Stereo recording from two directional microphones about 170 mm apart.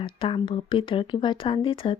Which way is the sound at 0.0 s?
30° left (ahead or behind).